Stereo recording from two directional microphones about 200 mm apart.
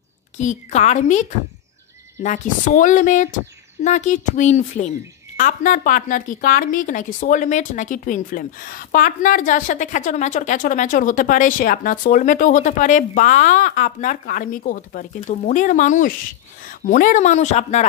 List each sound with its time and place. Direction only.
0.4 s speech: 35° left (ahead or behind)